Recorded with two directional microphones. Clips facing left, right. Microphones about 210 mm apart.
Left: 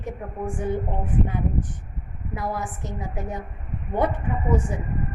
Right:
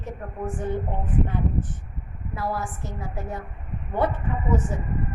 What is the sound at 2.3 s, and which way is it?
A woman's voice, 20° left (ahead or behind).